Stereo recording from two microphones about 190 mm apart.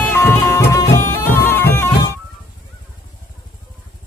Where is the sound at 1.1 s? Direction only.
15° left (ahead or behind).